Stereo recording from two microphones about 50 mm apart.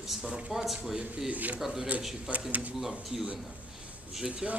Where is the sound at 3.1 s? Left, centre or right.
Centre.